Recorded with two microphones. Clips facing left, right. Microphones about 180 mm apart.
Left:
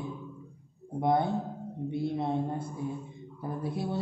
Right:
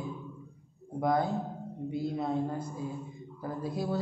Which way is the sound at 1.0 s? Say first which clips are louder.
Left 2 dB; 25° left (ahead or behind).